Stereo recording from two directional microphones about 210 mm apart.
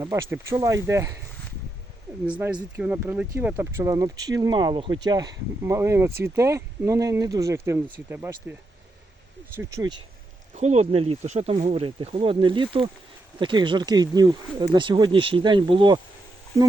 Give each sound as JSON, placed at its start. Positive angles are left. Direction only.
{"t": 0.0, "sound": "speech", "side_deg": -15}
{"t": 2.2, "sound": "speech", "side_deg": -5}
{"t": 9.6, "sound": "speech", "side_deg": -15}
{"t": 10.5, "sound": "speech", "side_deg": -35}